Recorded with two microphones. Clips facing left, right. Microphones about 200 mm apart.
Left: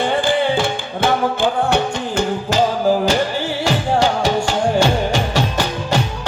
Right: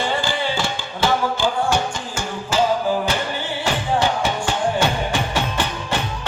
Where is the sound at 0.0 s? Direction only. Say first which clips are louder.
Left 6 dB; 55° left (ahead or behind).